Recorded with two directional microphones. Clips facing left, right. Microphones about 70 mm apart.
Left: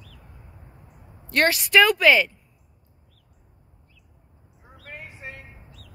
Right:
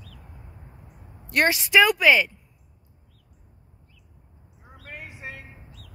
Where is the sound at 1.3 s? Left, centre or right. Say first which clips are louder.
Left 1 dB; centre.